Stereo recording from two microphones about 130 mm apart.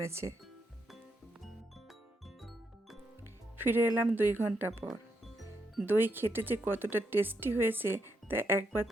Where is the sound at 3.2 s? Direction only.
15° right (ahead or behind).